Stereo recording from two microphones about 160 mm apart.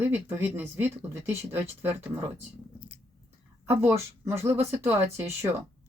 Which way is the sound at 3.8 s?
15° right (ahead or behind).